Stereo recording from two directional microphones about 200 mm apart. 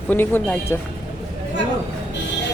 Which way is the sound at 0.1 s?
10° left (ahead or behind).